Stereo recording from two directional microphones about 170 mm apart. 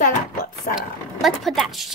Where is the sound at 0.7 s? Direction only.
Centre (ahead or behind).